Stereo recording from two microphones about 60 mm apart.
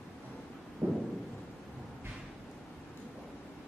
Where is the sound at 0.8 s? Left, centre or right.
Right.